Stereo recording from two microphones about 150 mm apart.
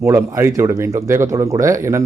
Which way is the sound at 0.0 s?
20° right (ahead or behind).